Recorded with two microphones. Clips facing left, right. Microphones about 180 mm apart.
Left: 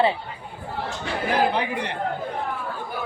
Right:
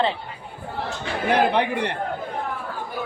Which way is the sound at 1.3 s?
65° right (ahead or behind).